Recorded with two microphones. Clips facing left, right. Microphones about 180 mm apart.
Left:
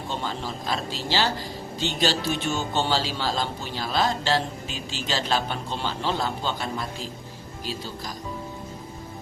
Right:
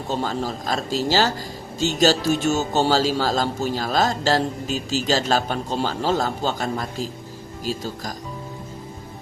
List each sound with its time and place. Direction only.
0.1 s a man's voice: 40° right (ahead or behind)